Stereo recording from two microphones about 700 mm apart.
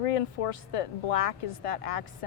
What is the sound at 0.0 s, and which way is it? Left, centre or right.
A woman's voice, left.